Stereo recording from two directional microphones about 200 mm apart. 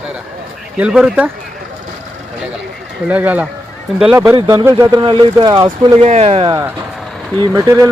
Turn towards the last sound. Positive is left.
turn(degrees=-15)  # may be behind; listen again after turning